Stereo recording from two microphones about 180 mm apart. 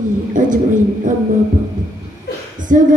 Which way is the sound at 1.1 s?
45° right (ahead or behind).